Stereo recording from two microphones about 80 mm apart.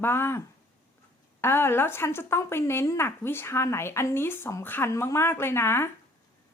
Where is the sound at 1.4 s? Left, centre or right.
Left.